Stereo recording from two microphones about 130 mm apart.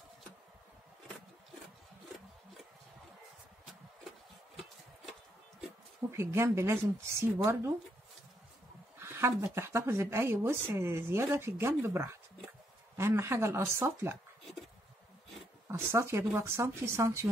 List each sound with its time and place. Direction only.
6.1 s speech: 20° right (ahead or behind)
9.0 s speech: 20° right (ahead or behind)
15.7 s speech: 20° right (ahead or behind)